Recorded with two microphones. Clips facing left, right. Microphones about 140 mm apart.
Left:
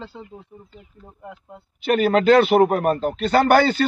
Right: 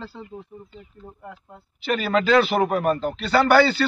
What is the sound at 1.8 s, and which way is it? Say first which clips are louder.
Speech: left 5 dB; 55° left (ahead or behind).